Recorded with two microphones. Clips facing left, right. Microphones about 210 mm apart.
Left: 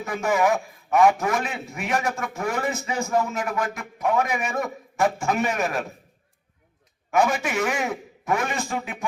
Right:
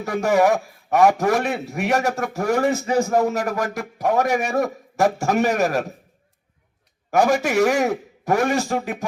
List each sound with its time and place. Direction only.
0.0 s a man's voice: 40° right (ahead or behind)
7.1 s a man's voice: 40° right (ahead or behind)